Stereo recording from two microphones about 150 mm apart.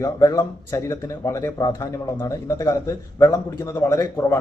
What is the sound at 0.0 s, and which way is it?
Speech, 25° left (ahead or behind).